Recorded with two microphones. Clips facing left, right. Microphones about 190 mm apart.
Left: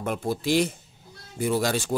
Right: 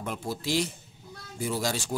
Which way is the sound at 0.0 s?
55° left (ahead or behind).